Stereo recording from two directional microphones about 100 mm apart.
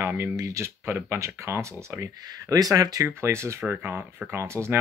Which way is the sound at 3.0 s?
25° right (ahead or behind).